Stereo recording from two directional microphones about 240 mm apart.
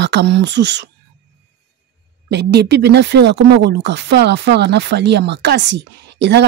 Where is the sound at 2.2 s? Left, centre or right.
Right.